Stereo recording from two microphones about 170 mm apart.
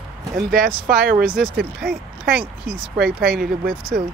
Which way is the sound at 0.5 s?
60° right (ahead or behind).